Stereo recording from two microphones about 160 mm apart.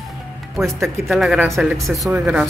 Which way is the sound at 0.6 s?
20° right (ahead or behind).